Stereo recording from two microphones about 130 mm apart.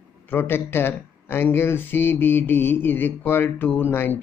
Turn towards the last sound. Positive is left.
turn(degrees=15)  # may be behind; listen again after turning